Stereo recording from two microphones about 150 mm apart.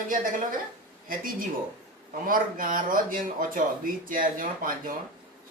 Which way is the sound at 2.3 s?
70° right (ahead or behind).